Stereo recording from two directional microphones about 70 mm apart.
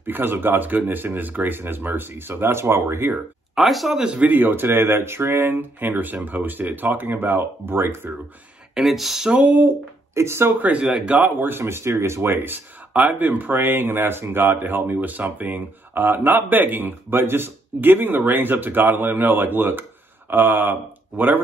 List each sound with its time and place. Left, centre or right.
0.0 s speech: right
3.5 s speech: centre
4.0 s speech: centre
8.7 s speech: centre
9.4 s speech: right
10.1 s speech: right
10.6 s speech: right
11.4 s speech: right